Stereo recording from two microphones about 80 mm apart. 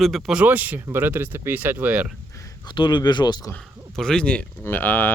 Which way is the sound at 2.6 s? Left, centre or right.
Left.